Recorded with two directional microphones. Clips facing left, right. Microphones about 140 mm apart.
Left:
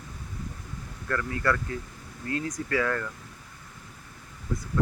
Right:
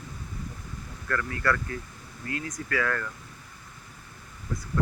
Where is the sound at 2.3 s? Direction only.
30° left (ahead or behind).